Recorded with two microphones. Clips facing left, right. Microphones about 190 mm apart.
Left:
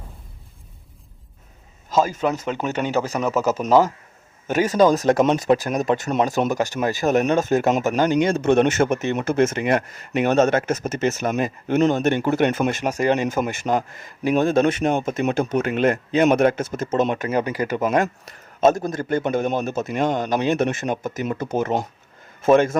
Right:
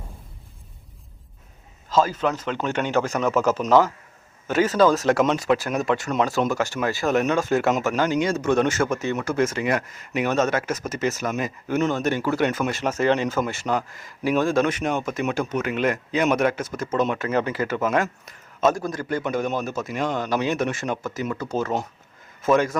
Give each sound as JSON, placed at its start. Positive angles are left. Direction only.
{"t": 1.9, "sound": "a man's voice", "side_deg": 10}
{"t": 6.0, "sound": "a man's voice", "side_deg": 30}
{"t": 6.2, "sound": "a man's voice", "side_deg": 15}
{"t": 12.8, "sound": "a man's voice", "side_deg": 15}
{"t": 17.3, "sound": "a man's voice", "side_deg": 15}